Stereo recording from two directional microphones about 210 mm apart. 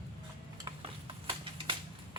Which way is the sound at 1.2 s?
25° right (ahead or behind).